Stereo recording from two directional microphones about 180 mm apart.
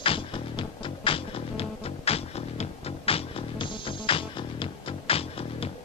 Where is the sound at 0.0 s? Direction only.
30° left (ahead or behind).